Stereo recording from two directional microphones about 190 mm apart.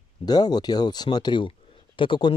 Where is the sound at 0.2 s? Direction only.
20° left (ahead or behind).